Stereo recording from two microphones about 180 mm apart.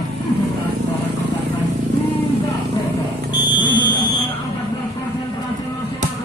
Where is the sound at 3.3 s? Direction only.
25° left (ahead or behind).